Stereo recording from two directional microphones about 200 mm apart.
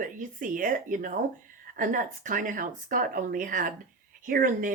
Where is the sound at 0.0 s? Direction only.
40° right (ahead or behind).